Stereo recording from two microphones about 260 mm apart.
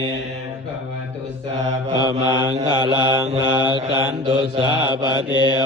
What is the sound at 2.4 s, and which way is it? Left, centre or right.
Mantra, centre.